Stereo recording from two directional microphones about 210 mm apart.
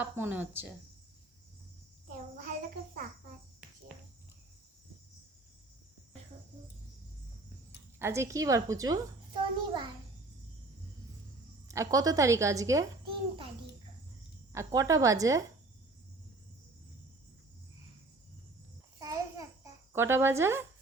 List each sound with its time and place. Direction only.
0.0 s a woman's voice: 10° right (ahead or behind)
7.9 s a woman's voice: 10° right (ahead or behind)
11.7 s a woman's voice: 15° right (ahead or behind)
14.5 s a woman's voice: 15° right (ahead or behind)
18.9 s babbling: 15° right (ahead or behind)
19.9 s a woman's voice: 10° right (ahead or behind)